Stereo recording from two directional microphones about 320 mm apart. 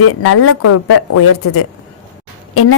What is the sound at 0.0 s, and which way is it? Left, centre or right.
A woman's voice, left.